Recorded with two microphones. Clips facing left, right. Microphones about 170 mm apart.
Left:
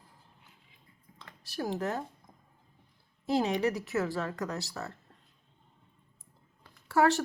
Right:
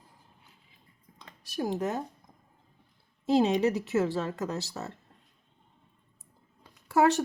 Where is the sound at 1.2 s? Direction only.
15° right (ahead or behind).